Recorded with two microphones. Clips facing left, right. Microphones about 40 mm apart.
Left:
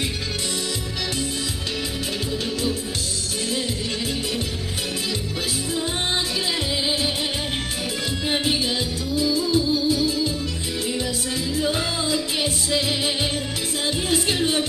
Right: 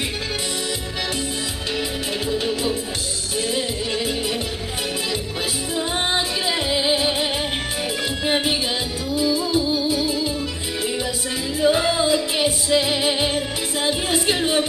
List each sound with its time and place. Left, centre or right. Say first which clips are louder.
2.3 s music: right 3 dB; centre
6.7 s music: right 4 dB; centre
9.1 s music: right 1 dB; centre
11.5 s music: right 8 dB; centre